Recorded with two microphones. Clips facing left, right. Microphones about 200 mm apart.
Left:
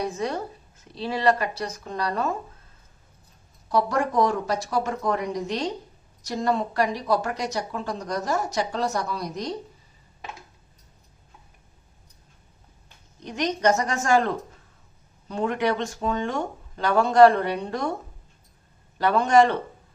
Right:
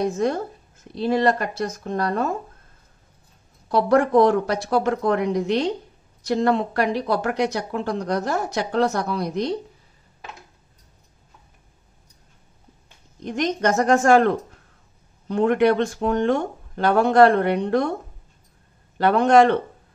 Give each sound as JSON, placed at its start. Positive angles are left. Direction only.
{"t": 0.0, "sound": "speech", "side_deg": -50}
{"t": 3.7, "sound": "speech", "side_deg": -60}
{"t": 13.2, "sound": "speech", "side_deg": -50}
{"t": 18.9, "sound": "speech", "side_deg": -60}